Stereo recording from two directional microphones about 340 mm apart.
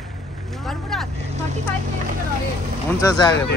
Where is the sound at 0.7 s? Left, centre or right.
Centre.